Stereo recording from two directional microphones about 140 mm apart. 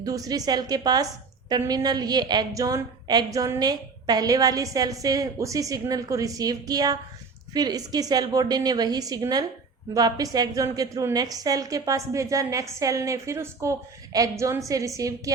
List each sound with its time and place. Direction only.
0.0 s a woman's voice: 25° right (ahead or behind)